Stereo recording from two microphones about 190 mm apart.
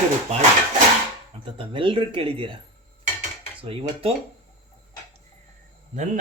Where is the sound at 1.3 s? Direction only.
25° right (ahead or behind).